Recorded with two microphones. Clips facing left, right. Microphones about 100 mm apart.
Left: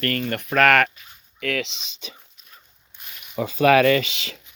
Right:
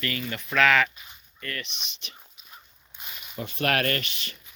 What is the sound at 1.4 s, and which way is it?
Speech, 90° left.